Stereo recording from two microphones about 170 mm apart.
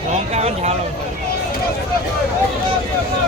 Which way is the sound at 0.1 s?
40° right (ahead or behind).